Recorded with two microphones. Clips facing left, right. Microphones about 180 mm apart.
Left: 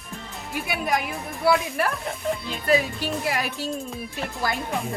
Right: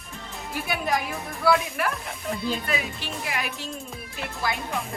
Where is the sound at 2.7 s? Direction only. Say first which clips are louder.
Left 8 dB; 40° left (ahead or behind).